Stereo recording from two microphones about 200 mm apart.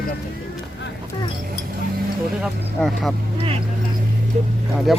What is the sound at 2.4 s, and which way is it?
Speech, centre (ahead or behind).